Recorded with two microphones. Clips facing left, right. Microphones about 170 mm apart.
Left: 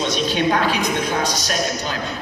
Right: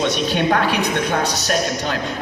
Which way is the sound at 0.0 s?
60° right (ahead or behind).